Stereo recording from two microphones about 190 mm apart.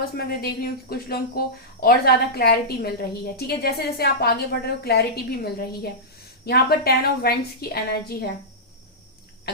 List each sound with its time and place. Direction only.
0.0 s a woman's voice: 50° left (ahead or behind)